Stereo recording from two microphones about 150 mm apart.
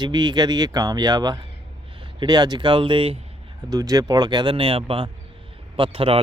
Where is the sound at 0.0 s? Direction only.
30° right (ahead or behind).